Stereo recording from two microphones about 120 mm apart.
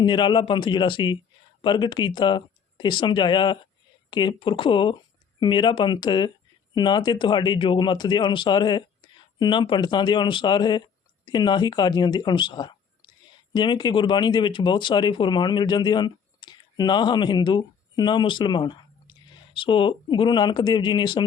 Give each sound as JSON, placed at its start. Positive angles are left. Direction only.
{"t": 0.0, "sound": "speech", "side_deg": 40}